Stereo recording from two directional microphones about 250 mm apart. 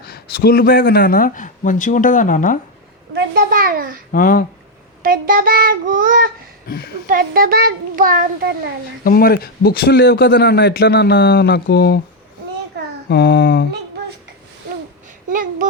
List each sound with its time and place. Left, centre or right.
0.0 s speech: left
3.2 s a child's voice: right
4.1 s speech: left
5.0 s a child's voice: right
6.7 s speech: left
7.1 s a child's voice: right
9.0 s speech: left
12.7 s a sound: right
13.1 s a sound: left
15.3 s a child's voice: right